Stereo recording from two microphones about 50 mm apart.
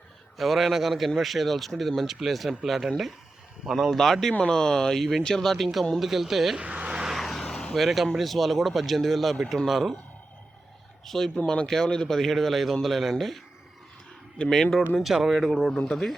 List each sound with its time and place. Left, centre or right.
0.3 s speech: centre
6.0 s speech: centre
6.6 s vehicle: right
7.1 s vehicle: centre
8.1 s speech: centre
11.0 s speech: centre
15.0 s speech: centre
15.7 s speech: centre